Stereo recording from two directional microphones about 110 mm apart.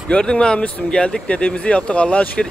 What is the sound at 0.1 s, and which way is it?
Speech, 10° left (ahead or behind).